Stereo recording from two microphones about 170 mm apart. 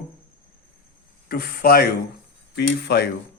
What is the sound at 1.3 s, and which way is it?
Speech, 60° left (ahead or behind).